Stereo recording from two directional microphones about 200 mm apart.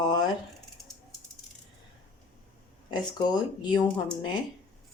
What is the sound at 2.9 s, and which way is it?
Speech, 20° left (ahead or behind).